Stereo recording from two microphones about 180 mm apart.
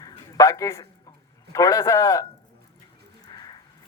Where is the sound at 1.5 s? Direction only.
15° left (ahead or behind).